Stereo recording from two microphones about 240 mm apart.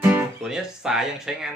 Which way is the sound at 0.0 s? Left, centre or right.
Centre.